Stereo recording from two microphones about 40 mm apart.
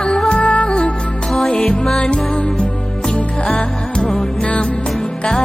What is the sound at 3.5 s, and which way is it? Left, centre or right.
Music, left.